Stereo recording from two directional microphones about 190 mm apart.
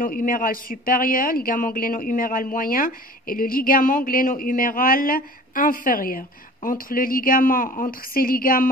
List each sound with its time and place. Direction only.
0.0 s speech: 45° left (ahead or behind)